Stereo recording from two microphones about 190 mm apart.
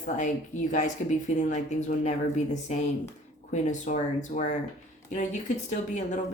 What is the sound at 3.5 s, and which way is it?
Speech, 40° left (ahead or behind).